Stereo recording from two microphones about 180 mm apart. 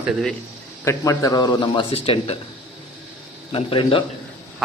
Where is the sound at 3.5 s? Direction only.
30° left (ahead or behind).